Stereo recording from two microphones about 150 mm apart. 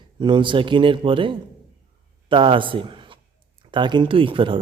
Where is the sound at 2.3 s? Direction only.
35° right (ahead or behind).